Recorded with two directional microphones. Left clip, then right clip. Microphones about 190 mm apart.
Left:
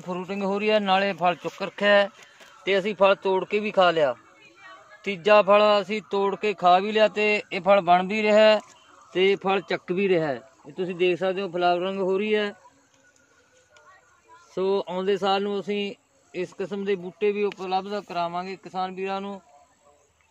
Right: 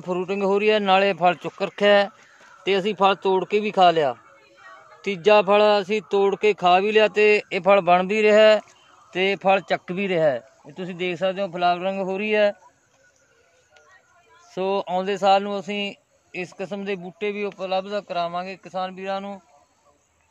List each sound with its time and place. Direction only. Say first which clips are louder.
0.0 s speech: right 6 dB; 75° right (ahead or behind); by 12.5 s 55° right (ahead or behind)
14.5 s a man's voice: right 2 dB; 50° right (ahead or behind); by 19.4 s 25° right (ahead or behind)